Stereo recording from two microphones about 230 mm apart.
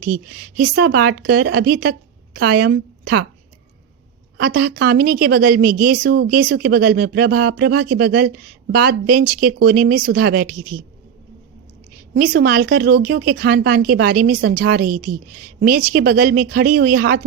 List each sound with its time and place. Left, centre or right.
0.0 s a woman's voice: right
4.4 s a woman's voice: right
12.1 s a woman's voice: right